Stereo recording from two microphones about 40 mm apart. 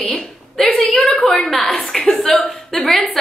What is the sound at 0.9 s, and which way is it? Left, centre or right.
Speech, centre.